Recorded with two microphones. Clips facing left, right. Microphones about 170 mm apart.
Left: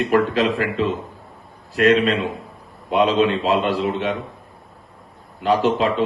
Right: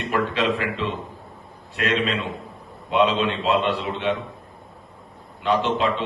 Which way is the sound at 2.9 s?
40° left (ahead or behind).